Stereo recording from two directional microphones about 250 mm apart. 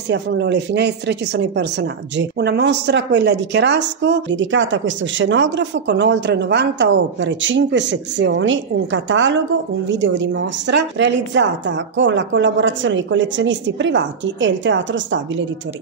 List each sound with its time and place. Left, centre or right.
0.1 s speech: right